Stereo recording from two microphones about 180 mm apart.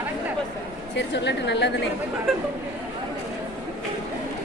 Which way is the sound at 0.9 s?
75° left (ahead or behind).